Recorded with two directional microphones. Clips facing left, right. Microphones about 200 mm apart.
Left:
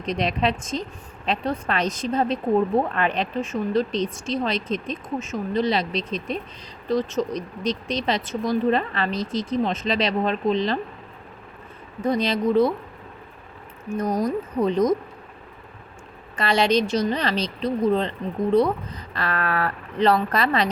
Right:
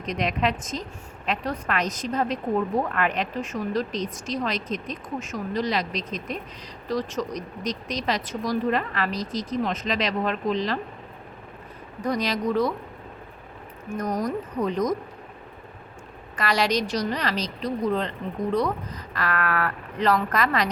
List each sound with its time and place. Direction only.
0.0 s a woman's voice: 30° left (ahead or behind)
12.0 s a woman's voice: 25° left (ahead or behind)
14.6 s a woman's voice: 30° left (ahead or behind)
16.3 s a woman's voice: 25° left (ahead or behind)